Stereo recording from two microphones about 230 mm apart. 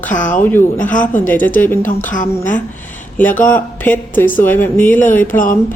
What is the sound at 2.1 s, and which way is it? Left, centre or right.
Speech, left.